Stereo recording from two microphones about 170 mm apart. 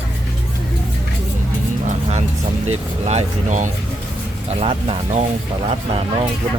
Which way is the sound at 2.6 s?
40° right (ahead or behind).